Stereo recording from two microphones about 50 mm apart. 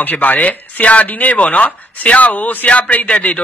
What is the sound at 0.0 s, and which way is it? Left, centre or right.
Speech, left.